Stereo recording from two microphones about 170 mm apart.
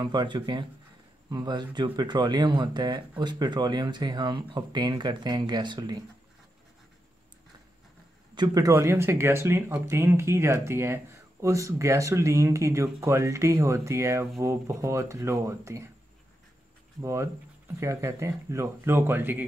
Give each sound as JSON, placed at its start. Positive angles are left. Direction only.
{"t": 0.0, "sound": "speech", "side_deg": -25}
{"t": 8.4, "sound": "speech", "side_deg": -20}
{"t": 17.0, "sound": "speech", "side_deg": -15}